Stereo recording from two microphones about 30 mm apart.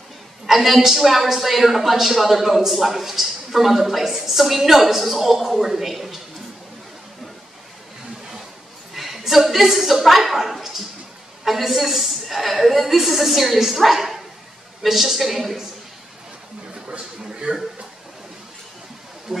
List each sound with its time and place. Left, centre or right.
0.5 s a woman's voice: centre
4.4 s a woman's voice: centre
8.9 s a woman's voice: centre
17.2 s a man's voice: right